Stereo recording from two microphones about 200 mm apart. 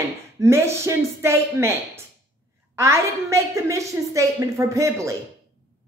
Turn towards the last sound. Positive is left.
turn(degrees=-15)  # may be behind; listen again after turning